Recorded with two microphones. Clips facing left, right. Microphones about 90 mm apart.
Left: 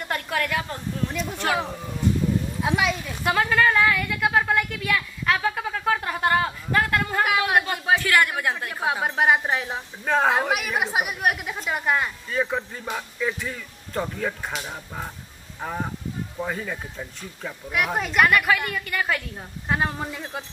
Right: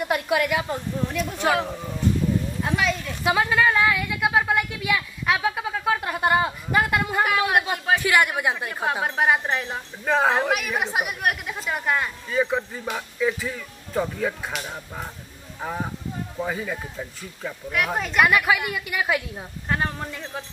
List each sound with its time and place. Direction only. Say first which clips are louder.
0.0 s a woman's voice: right 4 dB; 10° right (ahead or behind); by 3.1 s 5° left (ahead or behind)
3.3 s a woman's voice: even; 10° right (ahead or behind)
7.2 s speech: left 1 dB; centre (ahead or behind)
8.0 s a woman's voice: right 1 dB; 15° right (ahead or behind)
8.6 s a woman's voice: even; centre (ahead or behind)
19.7 s a woman's voice: left 1 dB; 5° left (ahead or behind)